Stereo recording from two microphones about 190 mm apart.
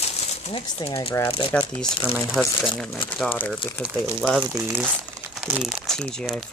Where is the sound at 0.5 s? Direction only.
30° left (ahead or behind).